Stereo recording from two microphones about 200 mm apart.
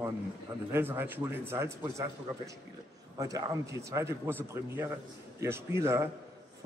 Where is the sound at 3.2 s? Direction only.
15° right (ahead or behind).